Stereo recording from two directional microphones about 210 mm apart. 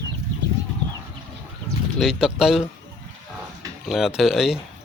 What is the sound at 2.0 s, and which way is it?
Speech, centre (ahead or behind).